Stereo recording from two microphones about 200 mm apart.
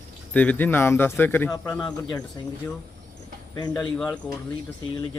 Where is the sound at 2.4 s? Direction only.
20° left (ahead or behind).